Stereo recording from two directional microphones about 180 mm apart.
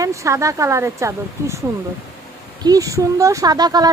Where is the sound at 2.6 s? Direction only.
20° right (ahead or behind).